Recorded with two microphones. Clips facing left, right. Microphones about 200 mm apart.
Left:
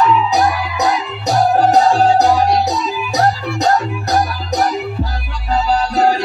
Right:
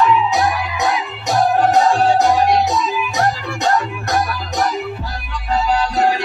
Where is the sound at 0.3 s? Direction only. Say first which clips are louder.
Left 2 dB; 40° left (ahead or behind).